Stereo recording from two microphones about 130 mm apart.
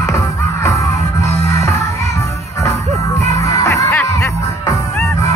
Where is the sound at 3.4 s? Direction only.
25° left (ahead or behind).